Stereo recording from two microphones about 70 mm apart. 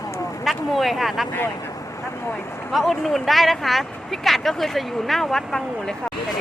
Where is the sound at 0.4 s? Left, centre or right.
Centre.